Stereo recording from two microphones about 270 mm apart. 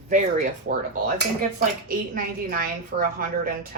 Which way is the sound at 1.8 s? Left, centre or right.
Right.